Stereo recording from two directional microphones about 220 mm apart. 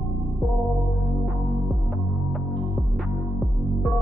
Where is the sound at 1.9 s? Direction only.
Centre (ahead or behind).